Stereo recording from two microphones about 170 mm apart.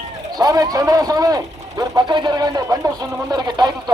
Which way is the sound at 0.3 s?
20° right (ahead or behind).